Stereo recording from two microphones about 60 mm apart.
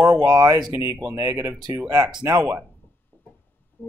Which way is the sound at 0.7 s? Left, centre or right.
Right.